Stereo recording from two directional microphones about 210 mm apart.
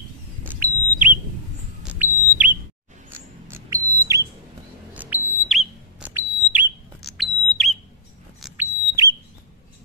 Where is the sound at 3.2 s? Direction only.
10° right (ahead or behind).